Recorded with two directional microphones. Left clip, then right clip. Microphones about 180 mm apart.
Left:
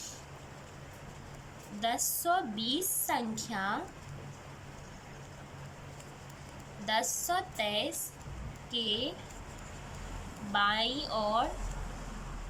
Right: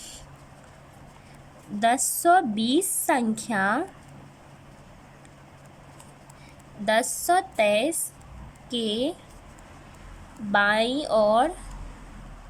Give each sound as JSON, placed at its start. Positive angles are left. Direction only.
{"t": 1.8, "sound": "a woman's voice", "side_deg": -55}
{"t": 6.8, "sound": "a woman's voice", "side_deg": -50}
{"t": 10.5, "sound": "a woman's voice", "side_deg": -50}